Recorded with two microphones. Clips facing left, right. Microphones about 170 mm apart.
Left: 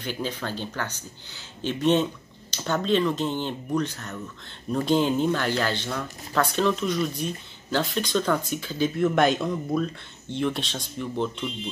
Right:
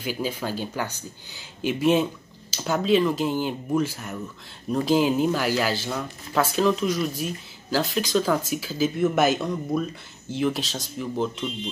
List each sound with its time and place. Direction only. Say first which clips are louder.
0.0 s speech: right 2 dB; 10° right (ahead or behind)